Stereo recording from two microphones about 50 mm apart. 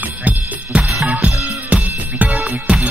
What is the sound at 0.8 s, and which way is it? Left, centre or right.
Drum kit, centre.